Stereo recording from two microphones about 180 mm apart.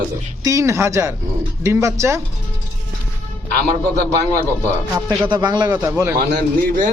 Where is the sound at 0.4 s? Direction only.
15° right (ahead or behind).